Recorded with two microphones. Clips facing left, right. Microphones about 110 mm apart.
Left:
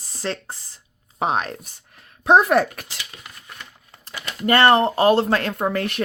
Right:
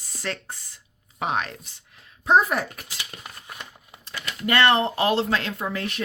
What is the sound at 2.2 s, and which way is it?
Speech, 75° left (ahead or behind).